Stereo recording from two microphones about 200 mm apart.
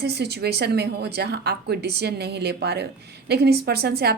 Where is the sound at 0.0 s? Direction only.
55° right (ahead or behind).